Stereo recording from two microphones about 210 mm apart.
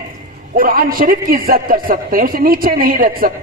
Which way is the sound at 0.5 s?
45° right (ahead or behind).